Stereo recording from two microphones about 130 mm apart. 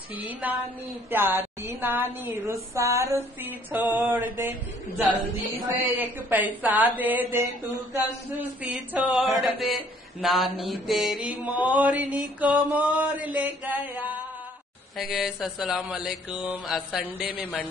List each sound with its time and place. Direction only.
0.4 s a woman's voice: 10° right (ahead or behind)
5.8 s a woman's voice: 15° right (ahead or behind)
15.0 s a man's voice: centre (ahead or behind)